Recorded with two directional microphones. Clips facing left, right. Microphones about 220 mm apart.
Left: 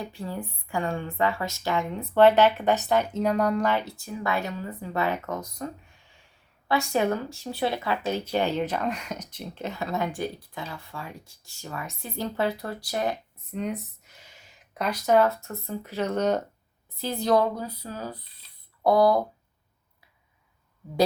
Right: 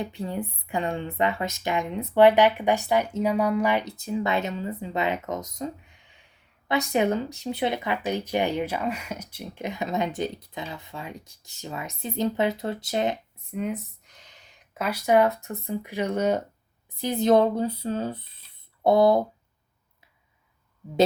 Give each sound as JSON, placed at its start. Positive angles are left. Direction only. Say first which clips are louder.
{"t": 0.0, "sound": "speech", "louder": "right 3 dB", "side_deg": -20}
{"t": 13.5, "sound": "speech", "louder": "right 1 dB", "side_deg": -5}
{"t": 14.1, "sound": "speech", "louder": "left 1 dB", "side_deg": 5}